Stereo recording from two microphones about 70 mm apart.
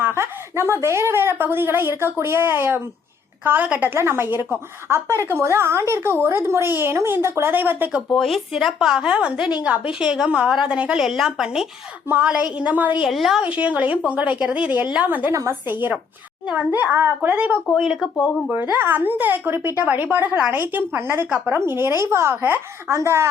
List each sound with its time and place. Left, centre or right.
0.0 s a woman's voice: right
7.5 s speech: right
8.1 s speech: centre
11.0 s speech: centre; by 12.9 s right
13.1 s speech: centre
13.4 s speech: centre
15.3 s a woman's voice: right
15.6 s speech: right
17.7 s speech: centre
18.7 s speech: right
21.5 s a woman's voice: right